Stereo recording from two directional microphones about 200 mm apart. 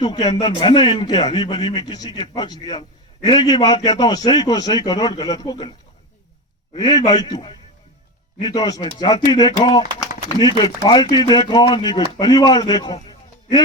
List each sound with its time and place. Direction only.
0.0 s speech: 20° left (ahead or behind)
6.7 s speech: 20° left (ahead or behind)